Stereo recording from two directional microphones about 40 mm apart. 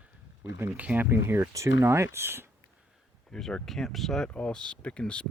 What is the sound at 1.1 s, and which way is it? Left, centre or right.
Speech, right.